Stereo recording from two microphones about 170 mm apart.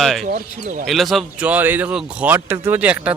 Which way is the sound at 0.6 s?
45° right (ahead or behind).